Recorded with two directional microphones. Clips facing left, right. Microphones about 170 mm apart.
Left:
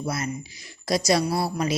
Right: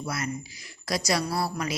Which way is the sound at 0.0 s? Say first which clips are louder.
Left 3 dB; 25° left (ahead or behind).